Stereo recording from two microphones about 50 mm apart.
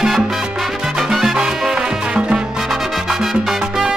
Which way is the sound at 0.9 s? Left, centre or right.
Centre.